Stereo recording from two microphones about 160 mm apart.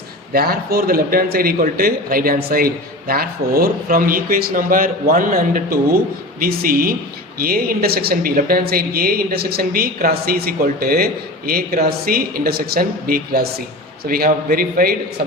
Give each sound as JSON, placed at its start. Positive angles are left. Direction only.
{"t": 0.3, "sound": "a man's voice", "side_deg": -70}